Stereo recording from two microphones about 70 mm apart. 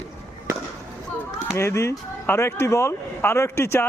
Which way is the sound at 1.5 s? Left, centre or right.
Left.